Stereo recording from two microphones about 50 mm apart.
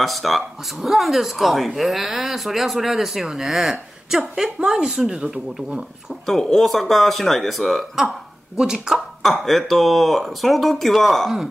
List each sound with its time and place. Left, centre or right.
0.0 s speech: centre
6.2 s speech: centre
8.5 s speech: centre
9.2 s speech: centre